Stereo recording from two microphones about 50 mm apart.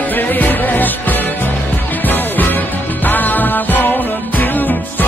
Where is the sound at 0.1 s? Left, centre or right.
Left.